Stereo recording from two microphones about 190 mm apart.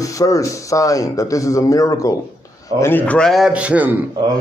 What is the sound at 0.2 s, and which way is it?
A man's voice, 15° left (ahead or behind).